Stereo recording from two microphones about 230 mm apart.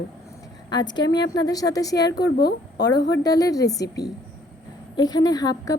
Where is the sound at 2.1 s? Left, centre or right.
Left.